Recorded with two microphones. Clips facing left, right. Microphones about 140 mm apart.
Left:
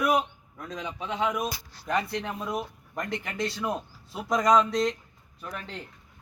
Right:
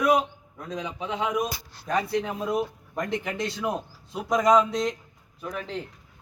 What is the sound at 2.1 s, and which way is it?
Speech, 10° right (ahead or behind).